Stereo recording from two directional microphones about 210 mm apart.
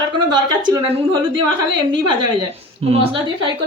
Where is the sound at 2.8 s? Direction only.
30° right (ahead or behind).